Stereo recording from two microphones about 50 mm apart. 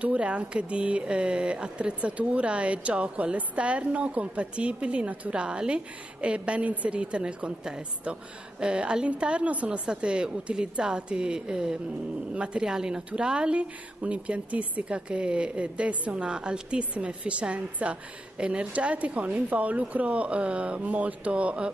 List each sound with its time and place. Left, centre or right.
0.0 s speech: right